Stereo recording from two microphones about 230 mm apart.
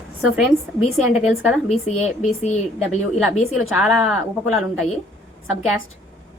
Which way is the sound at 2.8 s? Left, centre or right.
Centre.